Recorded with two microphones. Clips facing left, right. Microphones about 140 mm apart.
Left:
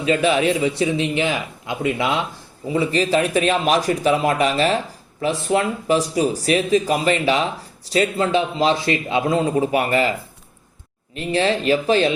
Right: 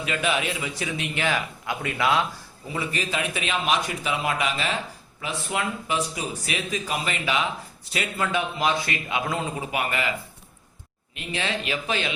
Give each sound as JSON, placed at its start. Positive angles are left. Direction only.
{"t": 0.0, "sound": "a man's voice", "side_deg": 30}